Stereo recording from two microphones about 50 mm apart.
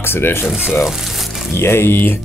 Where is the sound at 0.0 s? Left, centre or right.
Left.